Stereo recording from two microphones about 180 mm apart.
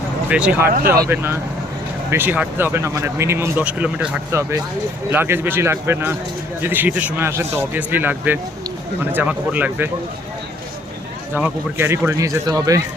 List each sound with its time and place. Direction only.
0.3 s speech: 5° right (ahead or behind)
11.3 s speech: 15° right (ahead or behind)